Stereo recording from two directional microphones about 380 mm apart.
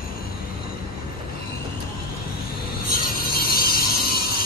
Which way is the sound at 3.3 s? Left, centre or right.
Left.